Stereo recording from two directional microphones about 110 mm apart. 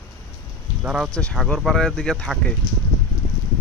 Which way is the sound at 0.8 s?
5° right (ahead or behind).